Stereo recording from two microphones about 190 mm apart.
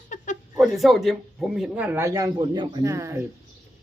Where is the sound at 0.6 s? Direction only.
Centre (ahead or behind).